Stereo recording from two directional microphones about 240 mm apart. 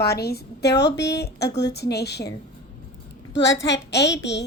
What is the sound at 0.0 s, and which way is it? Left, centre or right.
A child's voice, left.